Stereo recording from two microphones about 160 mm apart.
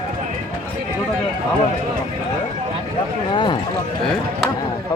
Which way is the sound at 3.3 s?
30° left (ahead or behind).